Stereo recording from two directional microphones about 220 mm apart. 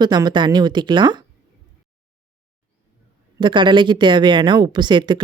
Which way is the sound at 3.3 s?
20° right (ahead or behind).